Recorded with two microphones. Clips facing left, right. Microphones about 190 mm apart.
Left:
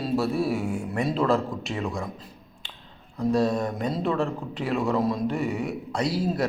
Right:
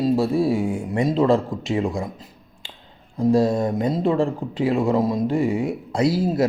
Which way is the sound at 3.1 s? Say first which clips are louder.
Right 5 dB; 30° right (ahead or behind).